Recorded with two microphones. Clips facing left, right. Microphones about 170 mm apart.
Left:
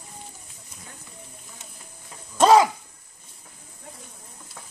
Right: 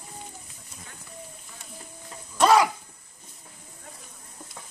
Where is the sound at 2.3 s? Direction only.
20° left (ahead or behind).